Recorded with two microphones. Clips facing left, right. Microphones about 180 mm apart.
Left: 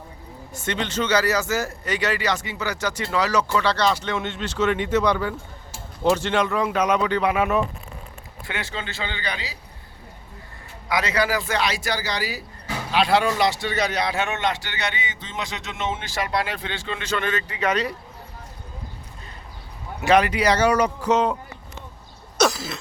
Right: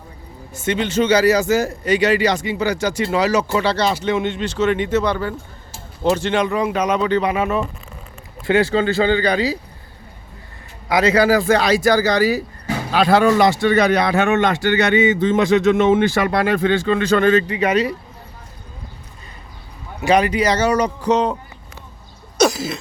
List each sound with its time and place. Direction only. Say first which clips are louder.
0.5 s speech: right 7 dB; 5° right (ahead or behind)
6.5 s speech: right 4 dB; 10° right (ahead or behind)
6.7 s speech: right 2 dB; 5° left (ahead or behind)
8.4 s a man's voice: right 16 dB; 35° right (ahead or behind)
10.8 s a man's voice: right 8 dB; 30° right (ahead or behind)
17.5 s speech: right 6 dB; 10° right (ahead or behind)
20.0 s speech: right 3 dB; centre (ahead or behind)
22.4 s throat clearing: right 5 dB; 15° right (ahead or behind)